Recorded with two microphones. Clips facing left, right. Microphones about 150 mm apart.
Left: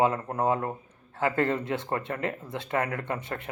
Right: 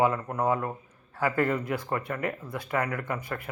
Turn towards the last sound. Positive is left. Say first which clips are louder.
# even
turn(degrees=25)  # may be behind; listen again after turning